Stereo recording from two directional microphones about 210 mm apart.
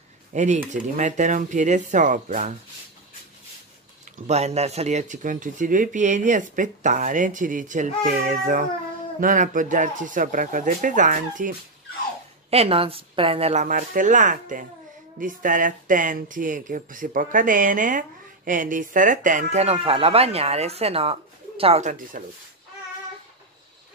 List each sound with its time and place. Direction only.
0.3 s speech: 35° right (ahead or behind)
4.3 s speech: 30° right (ahead or behind)
12.4 s speech: 30° right (ahead or behind)